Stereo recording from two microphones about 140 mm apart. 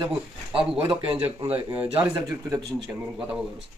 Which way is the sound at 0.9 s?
40° right (ahead or behind).